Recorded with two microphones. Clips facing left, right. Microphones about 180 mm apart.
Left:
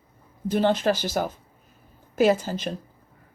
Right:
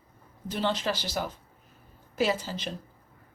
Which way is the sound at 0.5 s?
50° left (ahead or behind).